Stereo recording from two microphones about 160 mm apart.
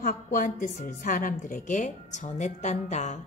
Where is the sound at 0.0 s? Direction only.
65° left (ahead or behind).